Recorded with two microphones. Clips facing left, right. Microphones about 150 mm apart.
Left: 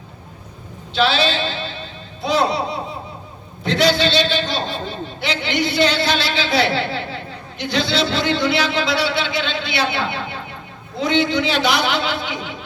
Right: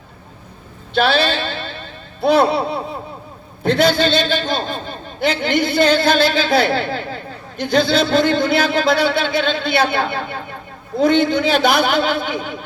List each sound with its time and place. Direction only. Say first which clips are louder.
0.9 s a man's voice: right 2 dB; 55° right (ahead or behind)